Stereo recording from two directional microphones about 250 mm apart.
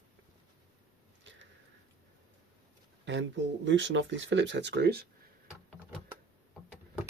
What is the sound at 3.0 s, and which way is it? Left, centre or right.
Speech, right.